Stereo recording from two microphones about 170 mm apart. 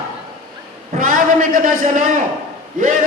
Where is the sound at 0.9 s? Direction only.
55° right (ahead or behind).